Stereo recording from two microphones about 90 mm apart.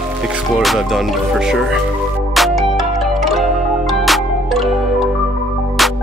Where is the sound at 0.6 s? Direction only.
Centre (ahead or behind).